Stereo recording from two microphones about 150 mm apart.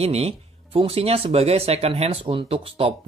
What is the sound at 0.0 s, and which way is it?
Speech, 45° right (ahead or behind).